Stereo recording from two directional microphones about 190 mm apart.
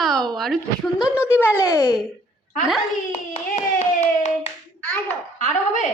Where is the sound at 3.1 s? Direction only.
35° left (ahead or behind).